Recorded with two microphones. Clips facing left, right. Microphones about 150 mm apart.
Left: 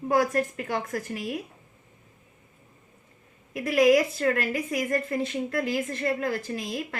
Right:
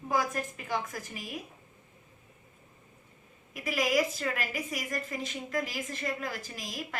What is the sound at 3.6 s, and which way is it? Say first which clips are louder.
A woman's voice: left 8 dB; 65° left (ahead or behind).